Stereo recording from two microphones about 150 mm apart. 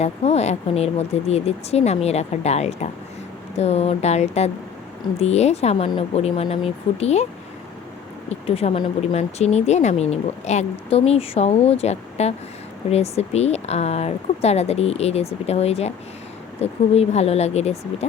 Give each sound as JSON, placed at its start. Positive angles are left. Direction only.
{"t": 0.0, "sound": "speech", "side_deg": 45}
{"t": 8.3, "sound": "speech", "side_deg": 40}